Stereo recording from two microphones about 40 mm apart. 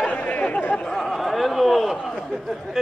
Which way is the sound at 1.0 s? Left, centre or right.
Centre.